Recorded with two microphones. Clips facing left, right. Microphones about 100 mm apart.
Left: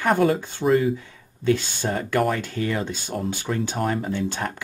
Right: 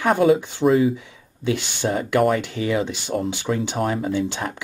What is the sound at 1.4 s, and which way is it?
Speech, 20° right (ahead or behind).